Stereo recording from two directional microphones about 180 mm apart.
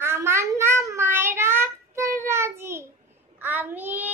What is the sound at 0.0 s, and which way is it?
Child singing, 15° right (ahead or behind).